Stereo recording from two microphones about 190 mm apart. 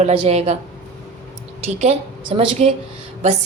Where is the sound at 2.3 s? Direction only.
30° right (ahead or behind).